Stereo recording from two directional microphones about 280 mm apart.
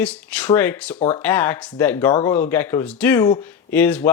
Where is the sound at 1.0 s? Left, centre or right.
Left.